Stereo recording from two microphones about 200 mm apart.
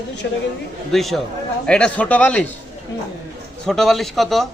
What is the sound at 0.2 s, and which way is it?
Speech, 60° left (ahead or behind).